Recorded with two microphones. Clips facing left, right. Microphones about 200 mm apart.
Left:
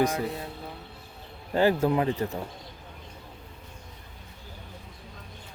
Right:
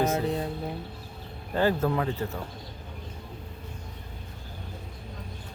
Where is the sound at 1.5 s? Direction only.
15° left (ahead or behind).